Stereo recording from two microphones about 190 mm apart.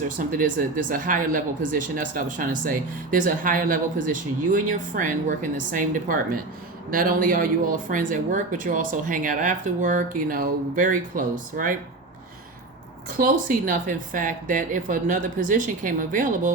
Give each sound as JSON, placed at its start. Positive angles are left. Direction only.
{"t": 0.2, "sound": "speech", "side_deg": -45}
{"t": 13.1, "sound": "speech", "side_deg": -45}